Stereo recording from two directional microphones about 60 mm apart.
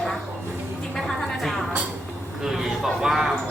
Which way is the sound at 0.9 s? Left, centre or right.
Centre.